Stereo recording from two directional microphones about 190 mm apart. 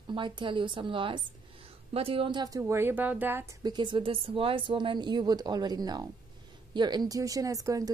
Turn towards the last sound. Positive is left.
turn(degrees=-20)  # may be behind; listen again after turning